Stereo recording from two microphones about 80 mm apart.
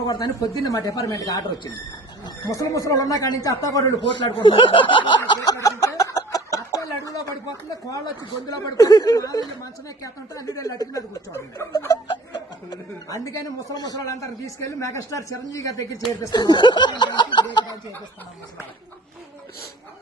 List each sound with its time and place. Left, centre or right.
0.1 s a man's voice: left
4.1 s speech: left
5.5 s a sound: left
8.4 s a man's voice: left
16.3 s snicker: left
17.5 s speech: left